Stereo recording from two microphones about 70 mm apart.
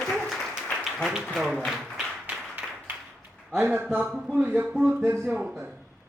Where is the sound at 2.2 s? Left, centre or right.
Right.